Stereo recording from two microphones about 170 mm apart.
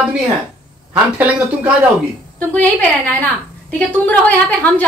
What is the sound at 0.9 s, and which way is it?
Speech, 10° right (ahead or behind).